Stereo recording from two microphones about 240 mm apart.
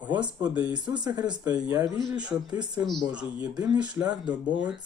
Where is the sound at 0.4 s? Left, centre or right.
Centre.